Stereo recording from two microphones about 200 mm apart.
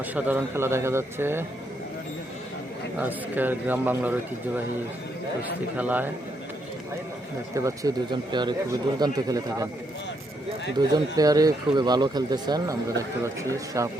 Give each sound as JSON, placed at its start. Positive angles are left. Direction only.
{"t": 0.1, "sound": "speech", "side_deg": -10}
{"t": 3.0, "sound": "speech", "side_deg": -10}
{"t": 7.5, "sound": "speech", "side_deg": -15}
{"t": 10.8, "sound": "speech", "side_deg": -20}